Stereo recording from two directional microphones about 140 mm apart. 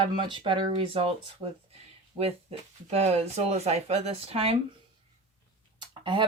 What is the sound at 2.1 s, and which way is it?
Speech, 45° right (ahead or behind).